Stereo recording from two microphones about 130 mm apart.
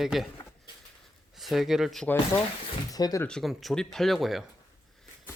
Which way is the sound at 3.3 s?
5° left (ahead or behind).